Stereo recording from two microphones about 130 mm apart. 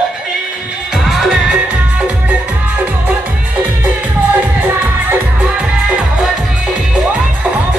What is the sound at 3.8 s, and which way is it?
Music, 15° right (ahead or behind).